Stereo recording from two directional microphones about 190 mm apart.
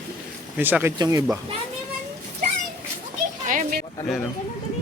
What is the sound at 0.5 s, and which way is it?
Speech, 10° right (ahead or behind).